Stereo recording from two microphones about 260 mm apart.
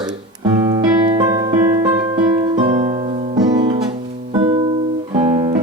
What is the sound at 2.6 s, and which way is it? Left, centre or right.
Music, right.